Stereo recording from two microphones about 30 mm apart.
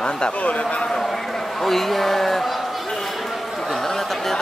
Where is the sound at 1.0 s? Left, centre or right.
Centre.